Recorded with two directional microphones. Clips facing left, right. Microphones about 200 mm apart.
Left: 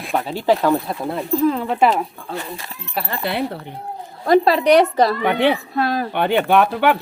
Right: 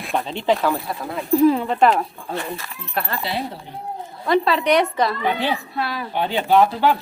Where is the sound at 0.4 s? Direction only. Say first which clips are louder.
Left 4 dB; 15° left (ahead or behind).